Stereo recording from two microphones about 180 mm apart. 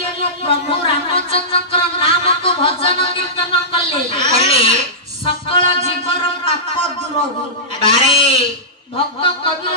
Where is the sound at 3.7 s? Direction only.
30° left (ahead or behind).